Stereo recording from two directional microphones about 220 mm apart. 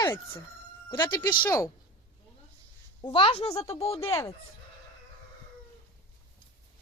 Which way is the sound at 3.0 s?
25° left (ahead or behind).